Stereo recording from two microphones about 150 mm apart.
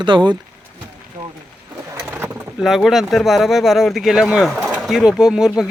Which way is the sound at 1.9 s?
15° right (ahead or behind).